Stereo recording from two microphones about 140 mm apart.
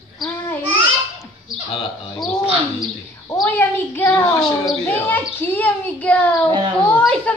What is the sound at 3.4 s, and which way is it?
A woman's voice, 15° left (ahead or behind).